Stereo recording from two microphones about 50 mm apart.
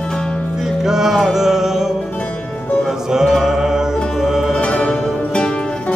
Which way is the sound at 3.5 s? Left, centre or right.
Centre.